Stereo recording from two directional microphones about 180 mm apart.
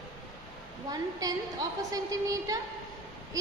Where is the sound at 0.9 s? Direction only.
20° right (ahead or behind).